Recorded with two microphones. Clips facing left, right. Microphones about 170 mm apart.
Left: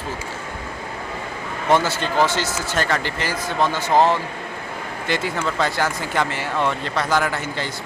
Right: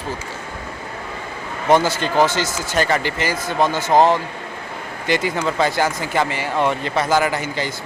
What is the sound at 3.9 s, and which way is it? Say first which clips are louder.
Speech: right 2 dB; 20° right (ahead or behind).